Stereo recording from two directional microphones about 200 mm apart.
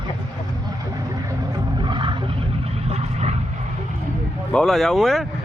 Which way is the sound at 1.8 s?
25° right (ahead or behind).